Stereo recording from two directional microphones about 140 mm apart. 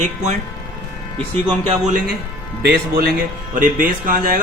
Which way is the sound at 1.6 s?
65° right (ahead or behind).